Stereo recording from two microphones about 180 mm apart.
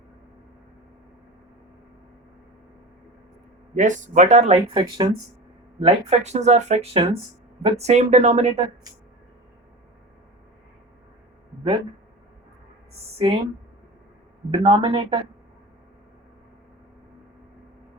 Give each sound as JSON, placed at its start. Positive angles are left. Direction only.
{"t": 3.8, "sound": "speech", "side_deg": -45}
{"t": 5.8, "sound": "speech", "side_deg": -35}
{"t": 13.1, "sound": "speech", "side_deg": -25}
{"t": 14.5, "sound": "speech", "side_deg": -30}